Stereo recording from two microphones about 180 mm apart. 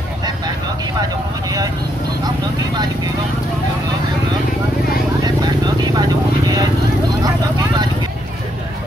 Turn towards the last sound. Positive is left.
turn(degrees=-25)  # may be behind; listen again after turning